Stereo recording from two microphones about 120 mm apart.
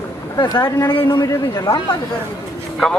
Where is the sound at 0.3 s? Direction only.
35° left (ahead or behind).